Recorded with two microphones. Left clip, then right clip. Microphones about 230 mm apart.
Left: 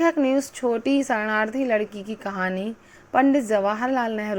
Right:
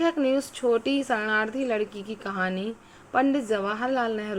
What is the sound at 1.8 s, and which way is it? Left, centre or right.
Speech, left.